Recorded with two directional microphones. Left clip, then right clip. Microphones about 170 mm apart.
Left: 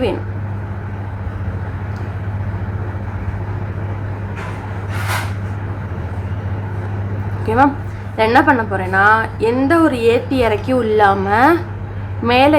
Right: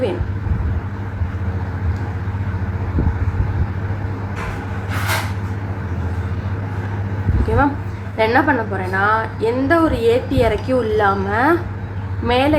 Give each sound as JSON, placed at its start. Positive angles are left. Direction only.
{"t": 7.5, "sound": "a woman's voice", "side_deg": 20}